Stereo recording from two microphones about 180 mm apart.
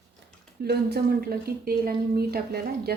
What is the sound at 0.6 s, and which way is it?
A woman's voice, 60° right (ahead or behind).